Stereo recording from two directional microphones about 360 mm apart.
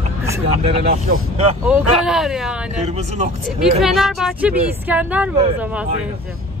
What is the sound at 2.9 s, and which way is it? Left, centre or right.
Speech, centre.